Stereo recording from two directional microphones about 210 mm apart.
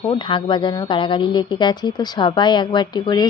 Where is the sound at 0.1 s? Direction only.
25° left (ahead or behind).